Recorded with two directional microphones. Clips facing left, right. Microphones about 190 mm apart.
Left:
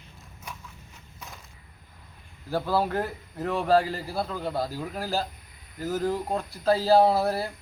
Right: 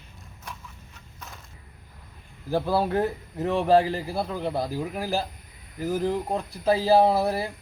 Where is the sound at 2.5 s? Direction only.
15° right (ahead or behind).